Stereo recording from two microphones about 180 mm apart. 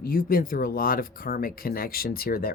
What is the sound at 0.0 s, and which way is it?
Speech, 55° left (ahead or behind).